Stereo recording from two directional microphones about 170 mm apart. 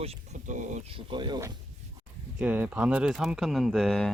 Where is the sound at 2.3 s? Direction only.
10° right (ahead or behind).